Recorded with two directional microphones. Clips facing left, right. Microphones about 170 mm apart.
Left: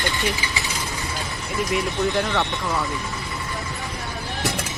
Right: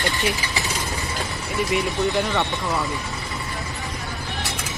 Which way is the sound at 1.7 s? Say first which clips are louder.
Even; centre (ahead or behind).